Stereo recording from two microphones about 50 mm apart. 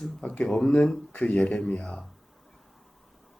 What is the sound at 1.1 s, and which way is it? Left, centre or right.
Speech, left.